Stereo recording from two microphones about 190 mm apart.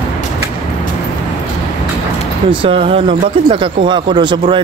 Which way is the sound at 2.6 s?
30° right (ahead or behind).